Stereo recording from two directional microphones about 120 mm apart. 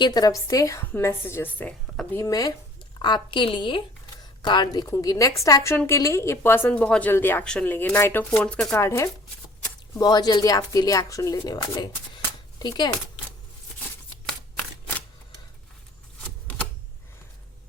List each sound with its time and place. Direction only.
0.0 s a woman's voice: 35° left (ahead or behind); by 1.7 s 15° left (ahead or behind)
2.1 s a woman's voice: 30° left (ahead or behind)
3.0 s speech: 40° left (ahead or behind)
4.9 s a woman's voice: 25° left (ahead or behind); by 8.7 s 10° left (ahead or behind)
8.7 s a woman's voice: 20° left (ahead or behind)
10.0 s speech: 35° left (ahead or behind)